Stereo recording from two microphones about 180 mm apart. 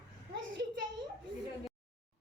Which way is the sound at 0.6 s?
65° right (ahead or behind).